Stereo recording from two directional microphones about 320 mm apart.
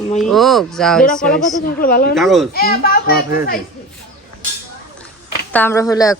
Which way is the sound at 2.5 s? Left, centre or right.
Left.